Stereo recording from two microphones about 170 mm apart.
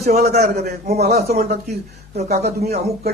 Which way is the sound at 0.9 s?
40° right (ahead or behind).